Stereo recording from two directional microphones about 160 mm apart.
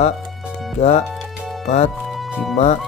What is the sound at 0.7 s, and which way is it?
Speech, 45° left (ahead or behind).